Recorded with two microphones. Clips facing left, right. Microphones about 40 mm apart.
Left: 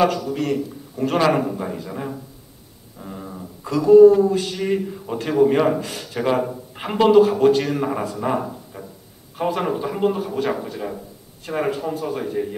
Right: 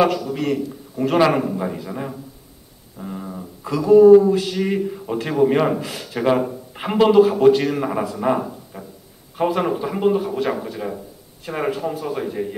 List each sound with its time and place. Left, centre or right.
0.0 s speech: centre